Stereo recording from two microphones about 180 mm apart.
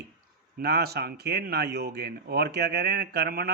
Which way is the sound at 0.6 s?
60° right (ahead or behind).